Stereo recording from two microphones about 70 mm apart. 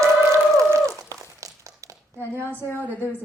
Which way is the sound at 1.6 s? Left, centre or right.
Right.